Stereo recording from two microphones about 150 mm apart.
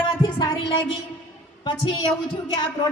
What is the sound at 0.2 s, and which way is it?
Music, 35° left (ahead or behind).